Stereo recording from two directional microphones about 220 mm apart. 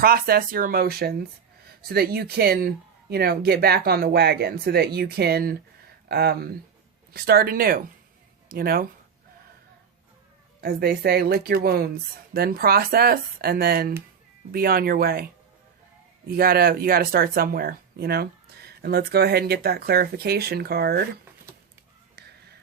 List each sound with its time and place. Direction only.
0.0 s speech: 40° right (ahead or behind)
10.6 s speech: 45° right (ahead or behind)